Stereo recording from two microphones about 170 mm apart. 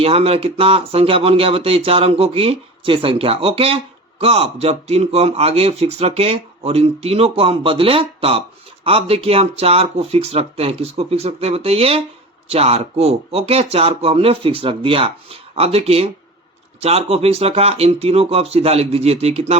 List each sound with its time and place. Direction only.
0.0 s speech: 35° right (ahead or behind)